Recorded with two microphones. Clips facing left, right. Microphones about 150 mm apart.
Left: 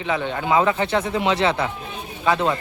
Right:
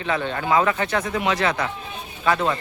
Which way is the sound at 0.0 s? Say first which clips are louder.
Left 1 dB; 15° left (ahead or behind).